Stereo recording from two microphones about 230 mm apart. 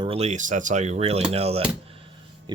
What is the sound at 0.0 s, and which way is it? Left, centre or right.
Speech, right.